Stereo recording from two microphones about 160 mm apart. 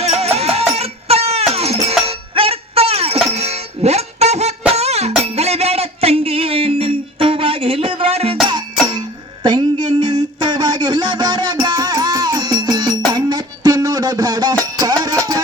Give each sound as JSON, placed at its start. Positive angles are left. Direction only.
{"t": 0.0, "sound": "music", "side_deg": -40}